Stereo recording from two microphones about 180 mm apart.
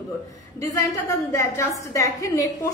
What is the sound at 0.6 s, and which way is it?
A woman's voice, 20° left (ahead or behind).